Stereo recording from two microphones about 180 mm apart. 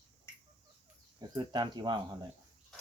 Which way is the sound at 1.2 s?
25° right (ahead or behind).